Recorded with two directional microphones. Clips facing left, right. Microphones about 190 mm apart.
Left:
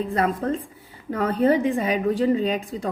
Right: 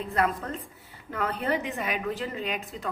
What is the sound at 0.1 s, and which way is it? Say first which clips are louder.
A woman's voice: left 1 dB; 35° left (ahead or behind).